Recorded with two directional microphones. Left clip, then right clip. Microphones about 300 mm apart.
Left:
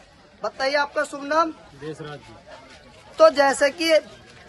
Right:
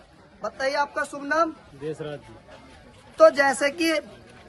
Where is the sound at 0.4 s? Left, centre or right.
Centre.